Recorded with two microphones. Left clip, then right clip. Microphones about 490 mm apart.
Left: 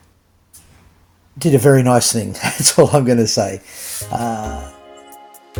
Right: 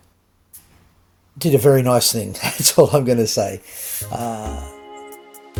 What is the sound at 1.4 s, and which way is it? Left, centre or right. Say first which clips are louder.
Speech: left 2 dB; right.